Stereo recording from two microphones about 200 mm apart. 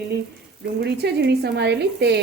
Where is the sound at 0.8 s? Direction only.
55° right (ahead or behind).